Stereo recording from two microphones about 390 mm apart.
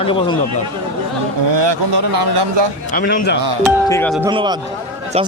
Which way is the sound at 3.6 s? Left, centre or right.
Centre.